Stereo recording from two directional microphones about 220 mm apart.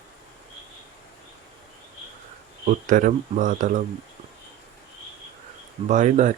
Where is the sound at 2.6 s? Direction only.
35° right (ahead or behind).